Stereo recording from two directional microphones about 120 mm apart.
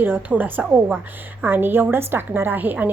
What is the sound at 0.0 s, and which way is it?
A woman's voice, 15° right (ahead or behind).